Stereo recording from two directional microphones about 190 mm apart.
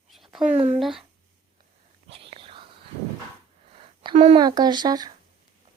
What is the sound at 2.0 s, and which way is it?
Whispering, 30° right (ahead or behind).